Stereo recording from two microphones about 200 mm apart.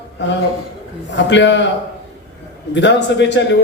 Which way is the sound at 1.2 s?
65° left (ahead or behind).